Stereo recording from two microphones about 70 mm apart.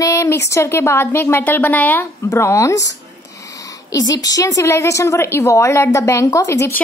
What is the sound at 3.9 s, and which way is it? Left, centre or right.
Speech, left.